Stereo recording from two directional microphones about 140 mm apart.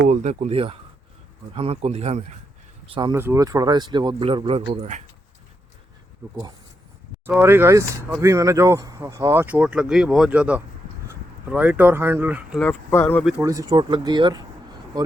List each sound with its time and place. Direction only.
0.1 s speech: 55° right (ahead or behind)
3.1 s speech: 20° right (ahead or behind); by 5.0 s 55° right (ahead or behind)
7.3 s speech: 15° right (ahead or behind)
12.5 s speech: 15° left (ahead or behind)
13.4 s speech: 25° right (ahead or behind)